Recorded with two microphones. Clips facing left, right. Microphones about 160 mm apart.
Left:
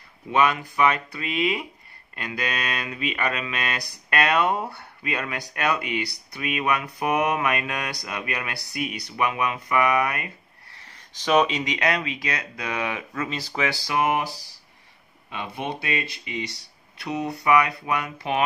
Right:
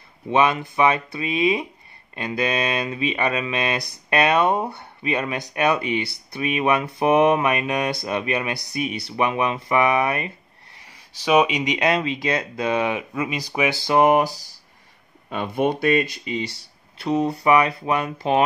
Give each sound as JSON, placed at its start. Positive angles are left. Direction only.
{"t": 0.3, "sound": "speech", "side_deg": -25}
{"t": 10.9, "sound": "speech", "side_deg": -10}
{"t": 13.9, "sound": "a sound", "side_deg": -40}
{"t": 15.2, "sound": "speech", "side_deg": -50}